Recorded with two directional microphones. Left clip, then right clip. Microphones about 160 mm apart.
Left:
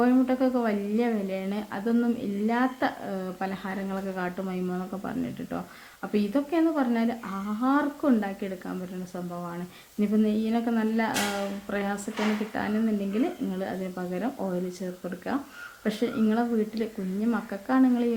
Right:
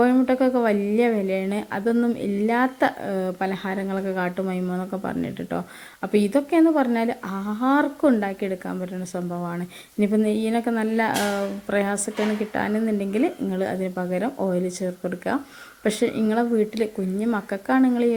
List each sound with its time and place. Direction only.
0.0 s a woman's voice: 40° right (ahead or behind)